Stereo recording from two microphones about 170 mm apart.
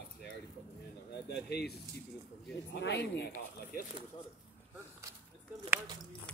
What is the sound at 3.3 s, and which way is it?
Speech, 60° left (ahead or behind).